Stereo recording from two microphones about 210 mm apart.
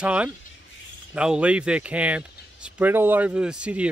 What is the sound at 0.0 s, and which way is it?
Speech, 5° right (ahead or behind).